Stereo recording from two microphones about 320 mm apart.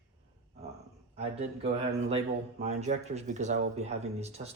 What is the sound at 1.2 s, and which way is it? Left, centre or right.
Speech, centre.